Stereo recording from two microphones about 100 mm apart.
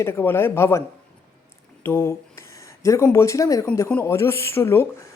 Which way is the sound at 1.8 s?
25° left (ahead or behind).